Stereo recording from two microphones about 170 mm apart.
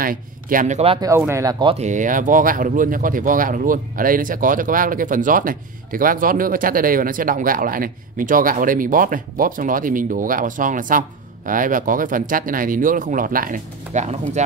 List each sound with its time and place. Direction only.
0.0 s speech: 55° right (ahead or behind)
1.0 s speech: 15° right (ahead or behind)
1.8 s speech: 45° right (ahead or behind)